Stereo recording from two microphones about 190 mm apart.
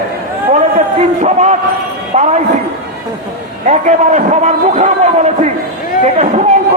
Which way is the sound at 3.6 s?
35° right (ahead or behind).